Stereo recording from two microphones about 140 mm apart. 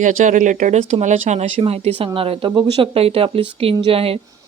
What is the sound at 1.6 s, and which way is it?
Speech, 45° right (ahead or behind).